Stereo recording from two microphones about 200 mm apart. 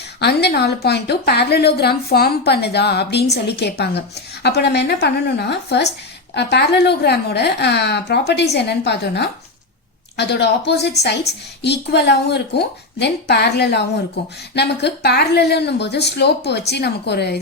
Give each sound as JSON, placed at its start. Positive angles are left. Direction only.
{"t": 0.2, "sound": "a woman's voice", "side_deg": 55}